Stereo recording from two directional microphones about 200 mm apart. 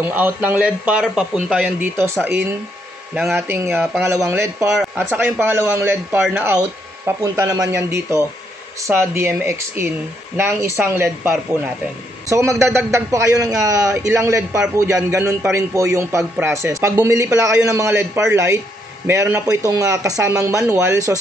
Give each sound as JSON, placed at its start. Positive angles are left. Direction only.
{"t": 0.0, "sound": "a man's voice", "side_deg": -10}
{"t": 3.3, "sound": "a man's voice", "side_deg": -10}
{"t": 7.1, "sound": "a man's voice", "side_deg": -15}